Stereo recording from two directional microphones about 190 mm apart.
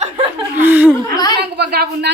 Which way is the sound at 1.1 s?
20° left (ahead or behind).